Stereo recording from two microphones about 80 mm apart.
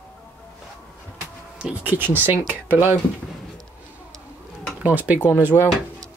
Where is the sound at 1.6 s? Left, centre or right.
Centre.